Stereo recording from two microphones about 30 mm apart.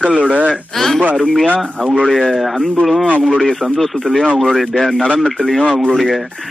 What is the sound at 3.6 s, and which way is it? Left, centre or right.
Speech, centre.